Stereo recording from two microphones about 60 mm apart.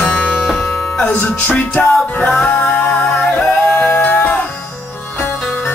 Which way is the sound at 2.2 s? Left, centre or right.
Centre.